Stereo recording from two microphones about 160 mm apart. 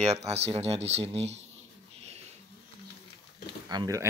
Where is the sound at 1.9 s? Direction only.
40° right (ahead or behind).